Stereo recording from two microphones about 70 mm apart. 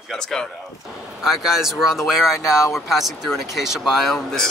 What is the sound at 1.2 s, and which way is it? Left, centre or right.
Speech, centre.